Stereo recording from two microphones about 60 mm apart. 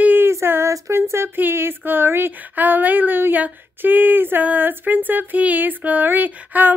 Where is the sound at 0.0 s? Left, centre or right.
Right.